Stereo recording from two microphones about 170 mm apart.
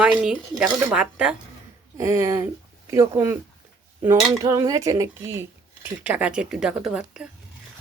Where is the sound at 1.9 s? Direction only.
15° right (ahead or behind).